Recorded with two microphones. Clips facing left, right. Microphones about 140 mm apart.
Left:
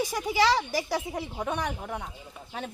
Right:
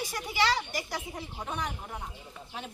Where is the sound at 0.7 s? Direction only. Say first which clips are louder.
Left 7 dB; 90° left; by 2.1 s 75° left (ahead or behind).